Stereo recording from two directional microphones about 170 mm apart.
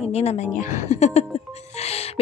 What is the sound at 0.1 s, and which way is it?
A woman's voice, 40° left (ahead or behind).